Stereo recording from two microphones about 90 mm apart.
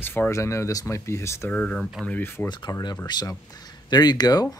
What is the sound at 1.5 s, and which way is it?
Speech, 10° left (ahead or behind).